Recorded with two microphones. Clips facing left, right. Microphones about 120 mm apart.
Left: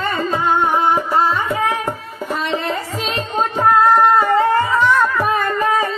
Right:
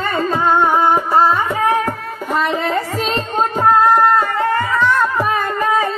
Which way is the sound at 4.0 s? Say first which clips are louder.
Even; centre (ahead or behind).